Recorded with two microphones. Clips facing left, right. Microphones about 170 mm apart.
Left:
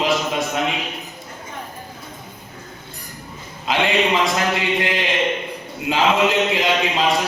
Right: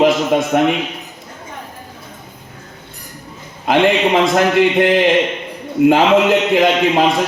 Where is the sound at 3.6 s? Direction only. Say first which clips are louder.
Right 6 dB; 55° right (ahead or behind).